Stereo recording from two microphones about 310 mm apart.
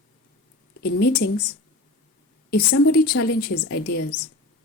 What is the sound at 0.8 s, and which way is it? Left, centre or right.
Speech, left.